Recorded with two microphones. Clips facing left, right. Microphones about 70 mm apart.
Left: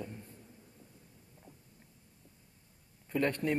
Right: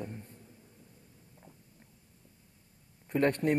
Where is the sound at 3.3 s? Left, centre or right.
Right.